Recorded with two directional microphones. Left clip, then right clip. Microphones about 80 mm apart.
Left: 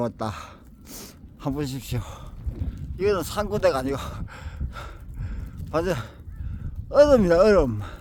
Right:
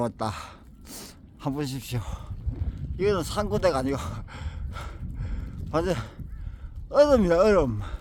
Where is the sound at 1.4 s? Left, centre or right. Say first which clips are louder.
Left 2 dB; centre.